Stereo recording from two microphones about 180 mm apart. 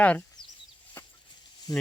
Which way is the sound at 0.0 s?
10° left (ahead or behind).